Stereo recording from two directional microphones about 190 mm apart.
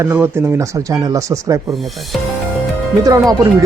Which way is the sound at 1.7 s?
Centre (ahead or behind).